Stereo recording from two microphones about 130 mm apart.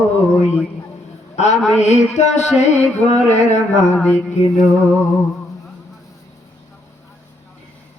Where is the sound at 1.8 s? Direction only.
60° left (ahead or behind).